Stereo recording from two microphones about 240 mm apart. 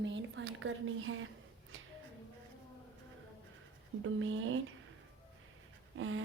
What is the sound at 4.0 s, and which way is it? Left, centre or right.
Speech, right.